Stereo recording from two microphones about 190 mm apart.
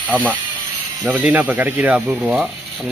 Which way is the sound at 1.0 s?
10° right (ahead or behind).